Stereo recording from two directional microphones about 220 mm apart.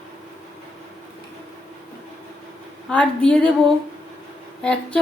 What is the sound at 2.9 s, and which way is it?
Speech, 5° left (ahead or behind).